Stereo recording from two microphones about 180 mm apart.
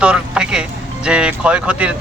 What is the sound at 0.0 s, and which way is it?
Music, 5° right (ahead or behind).